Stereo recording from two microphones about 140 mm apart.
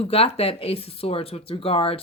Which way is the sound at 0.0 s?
45° left (ahead or behind).